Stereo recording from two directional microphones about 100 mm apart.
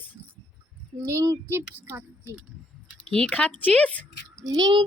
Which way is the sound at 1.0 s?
30° right (ahead or behind).